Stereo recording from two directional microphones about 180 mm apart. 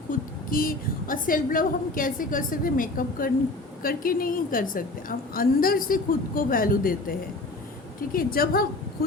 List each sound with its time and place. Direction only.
0.1 s a woman's voice: 50° left (ahead or behind)